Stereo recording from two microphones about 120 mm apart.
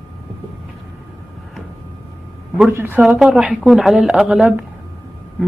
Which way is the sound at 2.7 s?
20° right (ahead or behind).